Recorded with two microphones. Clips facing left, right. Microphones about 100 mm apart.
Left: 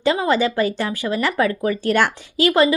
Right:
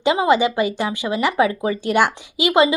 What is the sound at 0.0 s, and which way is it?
A woman's voice, 15° right (ahead or behind).